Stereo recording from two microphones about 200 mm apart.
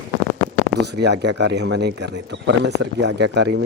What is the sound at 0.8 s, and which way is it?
Speech, 55° right (ahead or behind).